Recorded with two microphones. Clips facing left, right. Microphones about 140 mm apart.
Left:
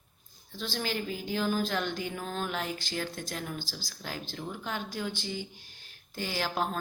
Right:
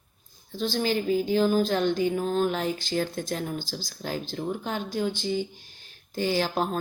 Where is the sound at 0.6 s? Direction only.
20° right (ahead or behind).